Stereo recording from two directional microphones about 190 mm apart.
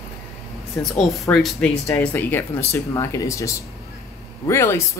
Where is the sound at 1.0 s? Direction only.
Centre (ahead or behind).